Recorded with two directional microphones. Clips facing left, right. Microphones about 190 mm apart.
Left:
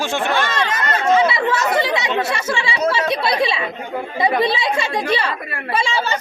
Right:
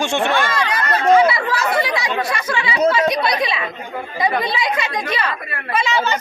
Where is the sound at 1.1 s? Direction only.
25° left (ahead or behind).